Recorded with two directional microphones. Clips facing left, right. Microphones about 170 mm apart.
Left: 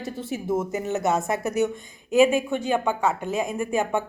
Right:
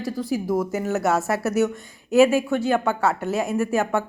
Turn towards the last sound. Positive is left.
turn(degrees=15)  # may be behind; listen again after turning